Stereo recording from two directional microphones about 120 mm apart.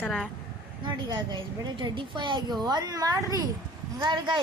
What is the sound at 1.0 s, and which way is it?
A woman's voice, 40° right (ahead or behind).